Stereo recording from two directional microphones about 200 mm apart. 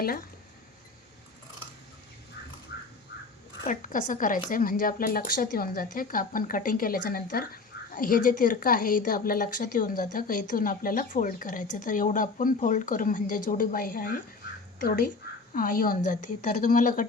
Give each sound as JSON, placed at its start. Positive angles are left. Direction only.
{"t": 3.6, "sound": "speech", "side_deg": 40}